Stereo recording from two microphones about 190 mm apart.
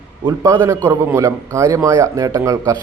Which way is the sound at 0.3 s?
15° right (ahead or behind).